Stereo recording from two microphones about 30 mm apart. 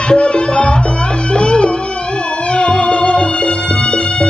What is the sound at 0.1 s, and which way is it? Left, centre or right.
Music, left.